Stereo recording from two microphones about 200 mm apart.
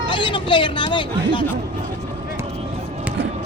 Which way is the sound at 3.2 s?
65° right (ahead or behind).